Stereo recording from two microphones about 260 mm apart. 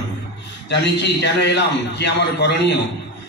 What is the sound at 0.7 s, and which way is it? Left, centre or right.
A man's voice, left.